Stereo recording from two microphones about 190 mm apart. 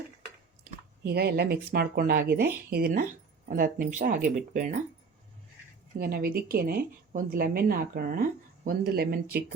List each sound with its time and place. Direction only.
1.0 s a woman's voice: 55° right (ahead or behind)
6.0 s a woman's voice: 50° right (ahead or behind)